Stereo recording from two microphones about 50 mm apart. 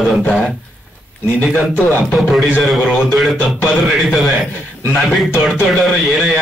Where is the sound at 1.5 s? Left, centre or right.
Left.